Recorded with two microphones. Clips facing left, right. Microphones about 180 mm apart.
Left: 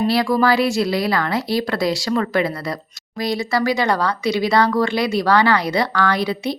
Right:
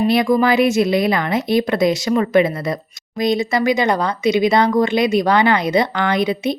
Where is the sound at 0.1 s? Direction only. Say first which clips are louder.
Right 2 dB; 20° right (ahead or behind).